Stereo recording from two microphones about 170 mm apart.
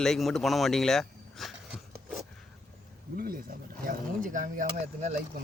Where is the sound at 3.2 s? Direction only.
60° right (ahead or behind).